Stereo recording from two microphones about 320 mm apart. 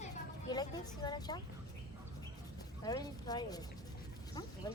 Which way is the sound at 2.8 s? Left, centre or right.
Centre.